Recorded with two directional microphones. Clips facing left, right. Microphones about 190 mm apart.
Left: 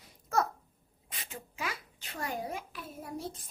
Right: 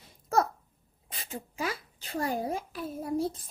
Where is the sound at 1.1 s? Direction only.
35° right (ahead or behind).